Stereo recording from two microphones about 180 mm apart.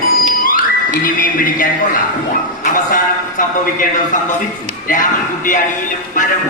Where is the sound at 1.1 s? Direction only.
50° left (ahead or behind).